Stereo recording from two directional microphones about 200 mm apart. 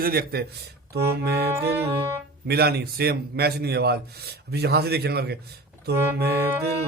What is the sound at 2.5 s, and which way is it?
A man's voice, 50° right (ahead or behind).